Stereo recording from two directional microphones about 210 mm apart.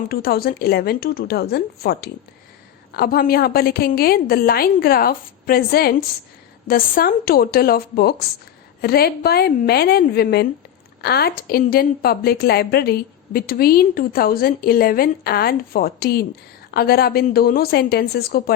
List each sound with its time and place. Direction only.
0.1 s a woman's voice: 45° left (ahead or behind)